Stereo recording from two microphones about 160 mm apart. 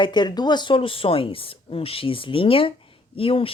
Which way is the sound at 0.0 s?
30° left (ahead or behind).